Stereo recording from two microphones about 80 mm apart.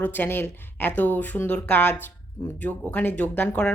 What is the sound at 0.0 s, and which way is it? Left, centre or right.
Speech, left.